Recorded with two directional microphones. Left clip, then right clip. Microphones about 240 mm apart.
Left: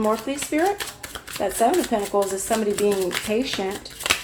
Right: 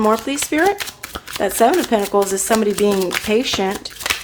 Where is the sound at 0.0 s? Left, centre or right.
Right.